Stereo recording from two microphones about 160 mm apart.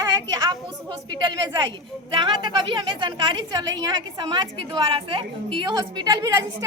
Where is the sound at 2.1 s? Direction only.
30° right (ahead or behind).